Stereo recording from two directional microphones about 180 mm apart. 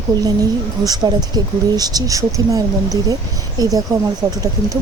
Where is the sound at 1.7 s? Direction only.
20° right (ahead or behind).